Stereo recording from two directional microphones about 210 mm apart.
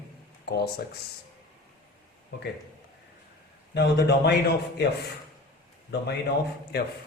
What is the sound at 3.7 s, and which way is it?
Speech, 50° left (ahead or behind).